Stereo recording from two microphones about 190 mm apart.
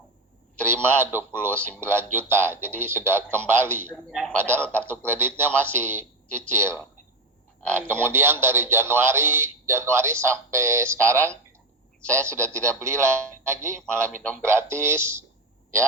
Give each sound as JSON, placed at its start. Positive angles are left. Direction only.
{"t": 0.6, "sound": "a man's voice", "side_deg": -10}
{"t": 1.5, "sound": "speech", "side_deg": 10}
{"t": 2.3, "sound": "a man's voice", "side_deg": -10}
{"t": 3.9, "sound": "speech", "side_deg": 0}
{"t": 5.0, "sound": "a man's voice", "side_deg": -10}
{"t": 6.2, "sound": "speech", "side_deg": 5}
{"t": 6.5, "sound": "a man's voice", "side_deg": -10}
{"t": 7.9, "sound": "a man's voice", "side_deg": -10}
{"t": 13.8, "sound": "speech", "side_deg": 5}
{"t": 14.4, "sound": "a man's voice", "side_deg": -15}